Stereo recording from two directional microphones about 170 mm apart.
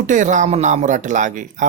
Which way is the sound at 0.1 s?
45° right (ahead or behind).